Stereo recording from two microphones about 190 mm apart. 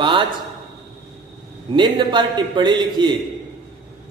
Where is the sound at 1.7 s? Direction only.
25° right (ahead or behind).